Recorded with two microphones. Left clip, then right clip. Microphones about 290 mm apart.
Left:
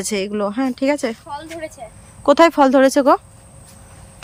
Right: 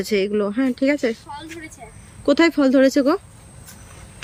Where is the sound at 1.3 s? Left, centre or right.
Centre.